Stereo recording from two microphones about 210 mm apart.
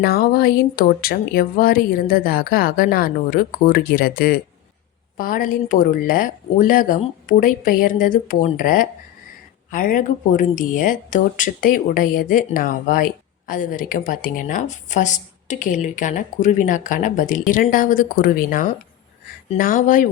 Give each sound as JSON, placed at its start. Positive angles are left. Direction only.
{"t": 0.0, "sound": "speech", "side_deg": 45}